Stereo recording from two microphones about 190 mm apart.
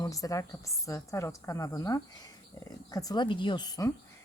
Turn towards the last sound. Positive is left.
turn(degrees=20)  # may be behind; listen again after turning